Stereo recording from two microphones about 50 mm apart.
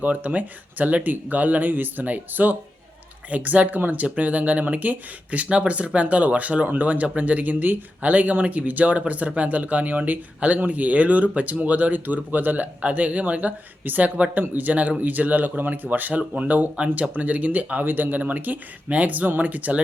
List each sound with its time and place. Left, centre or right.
0.0 s speech: right